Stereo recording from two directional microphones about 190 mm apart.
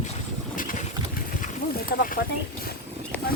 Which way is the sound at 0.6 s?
45° left (ahead or behind).